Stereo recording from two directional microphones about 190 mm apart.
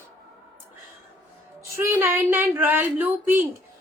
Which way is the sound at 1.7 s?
10° right (ahead or behind).